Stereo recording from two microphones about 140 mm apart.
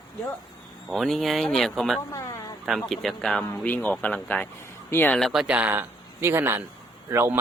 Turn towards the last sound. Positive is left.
turn(degrees=-20)  # may be behind; listen again after turning